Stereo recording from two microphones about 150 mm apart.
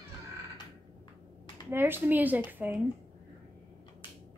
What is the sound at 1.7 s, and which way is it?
Speech, 15° right (ahead or behind).